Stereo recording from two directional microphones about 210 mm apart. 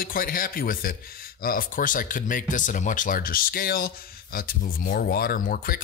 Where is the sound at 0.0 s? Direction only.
40° left (ahead or behind).